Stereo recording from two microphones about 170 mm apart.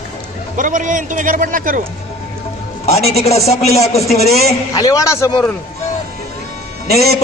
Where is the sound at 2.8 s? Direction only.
40° left (ahead or behind).